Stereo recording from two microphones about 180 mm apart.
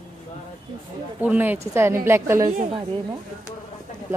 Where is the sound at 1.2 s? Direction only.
10° right (ahead or behind).